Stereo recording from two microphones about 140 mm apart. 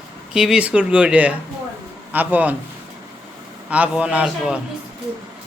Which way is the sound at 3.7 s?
10° right (ahead or behind).